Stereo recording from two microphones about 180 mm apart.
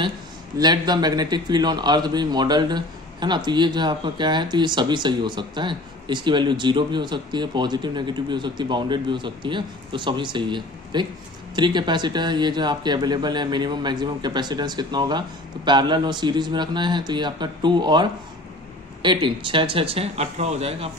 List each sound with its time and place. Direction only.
0.6 s a man's voice: 25° right (ahead or behind)
19.0 s speech: 25° right (ahead or behind)